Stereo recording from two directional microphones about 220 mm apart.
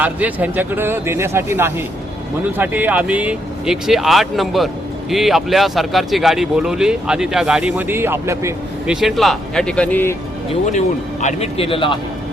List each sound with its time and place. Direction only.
0.0 s speech: 5° right (ahead or behind)
9.0 s speech: centre (ahead or behind)
10.5 s speech: 35° left (ahead or behind)